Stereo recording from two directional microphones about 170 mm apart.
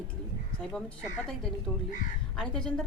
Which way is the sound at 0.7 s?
5° left (ahead or behind).